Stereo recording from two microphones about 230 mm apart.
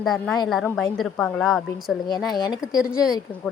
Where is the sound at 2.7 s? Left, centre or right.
Centre.